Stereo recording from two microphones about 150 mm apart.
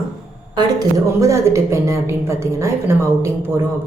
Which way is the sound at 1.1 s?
20° right (ahead or behind).